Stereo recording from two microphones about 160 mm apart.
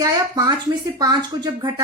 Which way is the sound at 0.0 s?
25° right (ahead or behind).